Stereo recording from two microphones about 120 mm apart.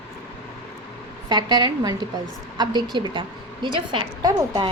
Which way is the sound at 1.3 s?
40° right (ahead or behind).